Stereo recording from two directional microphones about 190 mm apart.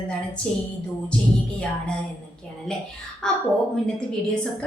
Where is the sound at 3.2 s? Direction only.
5° left (ahead or behind).